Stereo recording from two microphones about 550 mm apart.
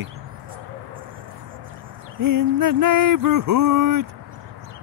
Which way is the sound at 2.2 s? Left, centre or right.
Right.